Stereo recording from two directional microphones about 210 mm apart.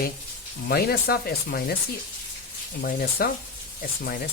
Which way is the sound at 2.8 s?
45° left (ahead or behind).